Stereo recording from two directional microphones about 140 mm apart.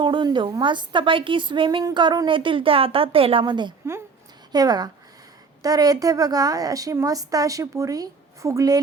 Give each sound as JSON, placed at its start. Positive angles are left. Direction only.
{"t": 0.0, "sound": "a woman's voice", "side_deg": -35}